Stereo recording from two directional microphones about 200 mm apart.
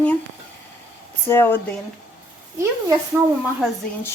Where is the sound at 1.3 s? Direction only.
10° left (ahead or behind).